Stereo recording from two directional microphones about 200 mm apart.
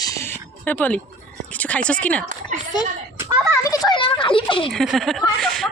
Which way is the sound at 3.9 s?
25° left (ahead or behind).